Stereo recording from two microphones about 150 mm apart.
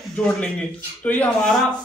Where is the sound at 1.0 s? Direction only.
10° left (ahead or behind).